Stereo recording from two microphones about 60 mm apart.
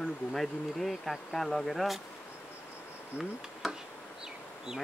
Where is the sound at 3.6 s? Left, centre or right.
Centre.